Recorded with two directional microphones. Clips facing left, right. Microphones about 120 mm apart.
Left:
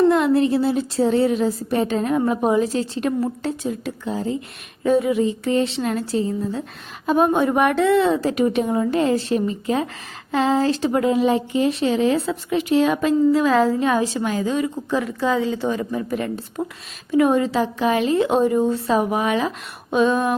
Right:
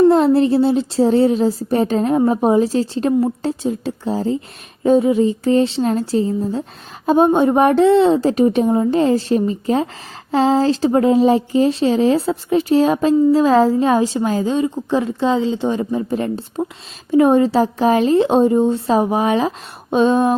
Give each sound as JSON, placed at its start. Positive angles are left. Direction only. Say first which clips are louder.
{"t": 0.1, "sound": "a woman's voice", "louder": "right 4 dB", "side_deg": -30}